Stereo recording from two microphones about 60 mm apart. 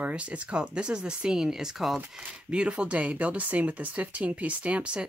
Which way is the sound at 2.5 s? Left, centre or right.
Centre.